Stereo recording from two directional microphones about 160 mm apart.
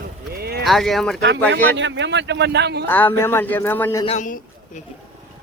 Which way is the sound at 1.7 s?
90° right.